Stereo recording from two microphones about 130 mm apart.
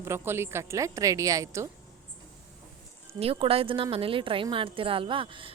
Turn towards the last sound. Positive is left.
turn(degrees=-40)  # may be behind; listen again after turning